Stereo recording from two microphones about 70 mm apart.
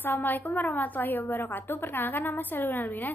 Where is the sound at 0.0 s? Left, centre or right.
Left.